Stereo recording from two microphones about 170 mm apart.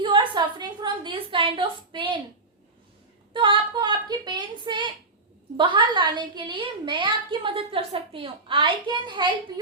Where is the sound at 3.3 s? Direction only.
30° right (ahead or behind).